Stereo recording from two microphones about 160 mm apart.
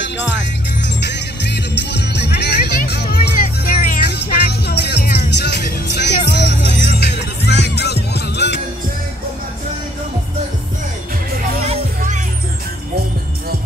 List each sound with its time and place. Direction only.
1.0 s music: 90° left